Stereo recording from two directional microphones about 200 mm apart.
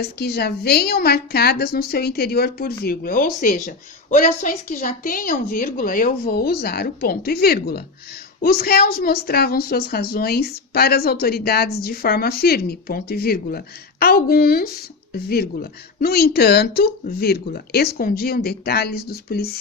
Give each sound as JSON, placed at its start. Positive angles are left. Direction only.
{"t": 0.0, "sound": "a woman's voice", "side_deg": 55}